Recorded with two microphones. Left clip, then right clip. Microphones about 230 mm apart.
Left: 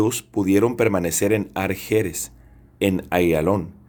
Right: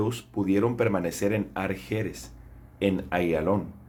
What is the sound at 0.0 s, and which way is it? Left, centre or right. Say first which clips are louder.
Speech: left 7 dB; left.